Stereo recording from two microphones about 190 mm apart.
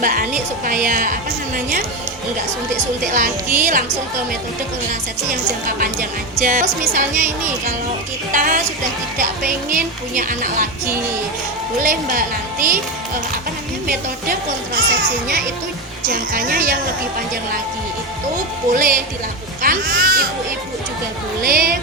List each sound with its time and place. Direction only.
0.0 s speech: 45° right (ahead or behind)
3.1 s speech: 45° right (ahead or behind)
5.6 s speech: 50° right (ahead or behind)
8.3 s speech: 45° right (ahead or behind)
13.8 s speech: 50° right (ahead or behind)
16.0 s speech: 45° right (ahead or behind)
18.7 s speech: 45° right (ahead or behind)
21.4 s speech: 50° right (ahead or behind)